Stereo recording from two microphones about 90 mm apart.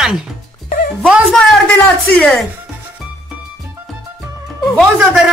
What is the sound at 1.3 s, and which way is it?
A man's voice, centre (ahead or behind).